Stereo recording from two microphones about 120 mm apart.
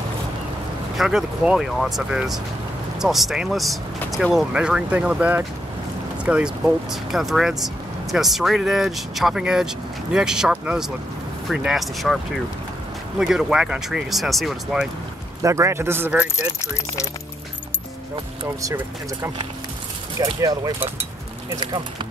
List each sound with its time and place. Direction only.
0.9 s speech: 5° right (ahead or behind)
13.2 s speech: 5° right (ahead or behind)
15.4 s speech: 25° right (ahead or behind)
16.6 s speech: 25° left (ahead or behind)
20.3 s speech: 30° right (ahead or behind)
21.5 s speech: 40° right (ahead or behind)